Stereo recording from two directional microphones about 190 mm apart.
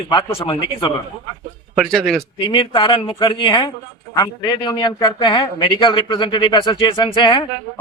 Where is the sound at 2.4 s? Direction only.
25° left (ahead or behind).